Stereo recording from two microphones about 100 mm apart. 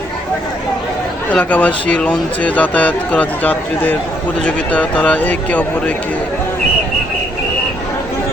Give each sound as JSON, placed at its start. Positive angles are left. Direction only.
{"t": 1.3, "sound": "speech", "side_deg": 15}